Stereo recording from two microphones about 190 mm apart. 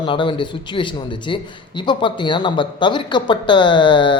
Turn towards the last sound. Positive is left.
turn(degrees=25)  # may be behind; listen again after turning